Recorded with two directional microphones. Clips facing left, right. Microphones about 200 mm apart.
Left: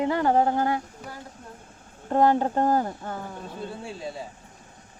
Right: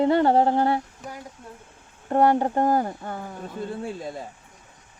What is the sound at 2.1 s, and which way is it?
Speech, 15° right (ahead or behind).